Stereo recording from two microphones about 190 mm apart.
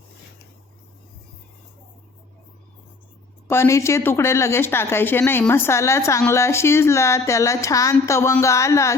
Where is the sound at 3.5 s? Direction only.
15° left (ahead or behind).